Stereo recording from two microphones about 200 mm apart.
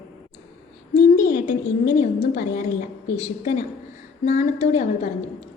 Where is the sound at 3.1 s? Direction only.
35° left (ahead or behind).